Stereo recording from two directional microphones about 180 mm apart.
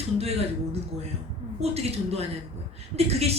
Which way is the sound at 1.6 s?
35° right (ahead or behind).